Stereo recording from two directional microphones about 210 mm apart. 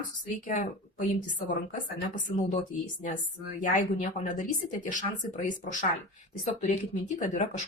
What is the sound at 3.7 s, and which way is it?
Speech, 35° left (ahead or behind).